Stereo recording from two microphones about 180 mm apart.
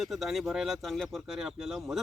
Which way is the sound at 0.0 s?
Centre (ahead or behind).